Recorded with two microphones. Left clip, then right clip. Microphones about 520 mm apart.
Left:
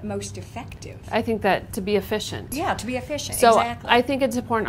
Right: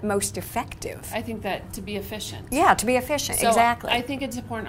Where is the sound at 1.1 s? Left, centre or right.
Left.